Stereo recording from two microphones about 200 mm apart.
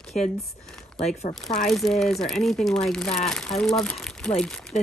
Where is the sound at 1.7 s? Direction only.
Centre (ahead or behind).